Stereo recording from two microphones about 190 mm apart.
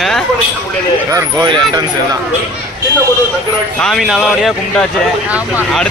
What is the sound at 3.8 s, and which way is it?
A man's voice, centre (ahead or behind).